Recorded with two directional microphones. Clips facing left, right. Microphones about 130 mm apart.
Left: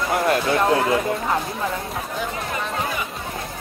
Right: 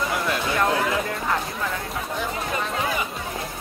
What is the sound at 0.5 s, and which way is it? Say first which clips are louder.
Speech: left 4 dB; 25° left (ahead or behind).